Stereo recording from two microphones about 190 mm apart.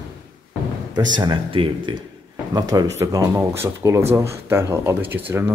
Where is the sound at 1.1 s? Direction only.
25° right (ahead or behind); by 5.5 s 10° right (ahead or behind).